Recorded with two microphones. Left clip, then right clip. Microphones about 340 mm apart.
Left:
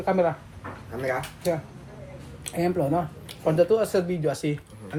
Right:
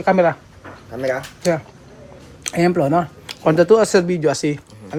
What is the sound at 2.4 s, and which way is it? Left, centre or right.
Speech, right.